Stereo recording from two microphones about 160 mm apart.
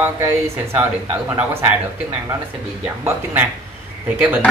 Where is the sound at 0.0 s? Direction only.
15° right (ahead or behind).